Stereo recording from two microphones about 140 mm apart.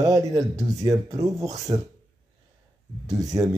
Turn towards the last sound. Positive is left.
turn(degrees=-25)  # may be behind; listen again after turning